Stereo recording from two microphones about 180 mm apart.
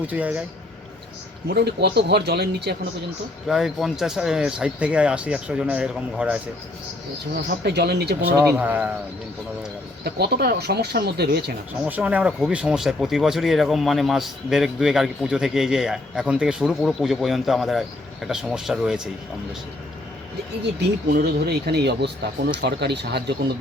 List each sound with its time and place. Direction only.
0.1 s speech: 10° right (ahead or behind)
1.5 s speech: 65° right (ahead or behind)
3.4 s speech: centre (ahead or behind)
7.4 s speech: 65° right (ahead or behind)
8.4 s speech: 10° right (ahead or behind)
10.0 s speech: 65° right (ahead or behind)
11.9 s speech: 10° right (ahead or behind)
20.8 s speech: 65° right (ahead or behind)